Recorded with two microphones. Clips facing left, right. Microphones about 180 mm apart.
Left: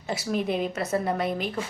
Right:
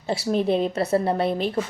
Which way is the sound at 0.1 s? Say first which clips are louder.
Right 5 dB; 30° right (ahead or behind).